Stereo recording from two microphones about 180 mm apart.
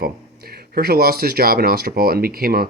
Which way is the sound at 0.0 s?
55° right (ahead or behind).